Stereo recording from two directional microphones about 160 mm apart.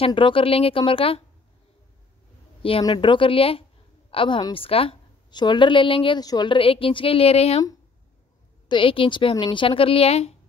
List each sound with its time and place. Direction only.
0.0 s a woman's voice: 30° left (ahead or behind)
2.8 s a woman's voice: 30° left (ahead or behind)
8.6 s a woman's voice: 30° left (ahead or behind)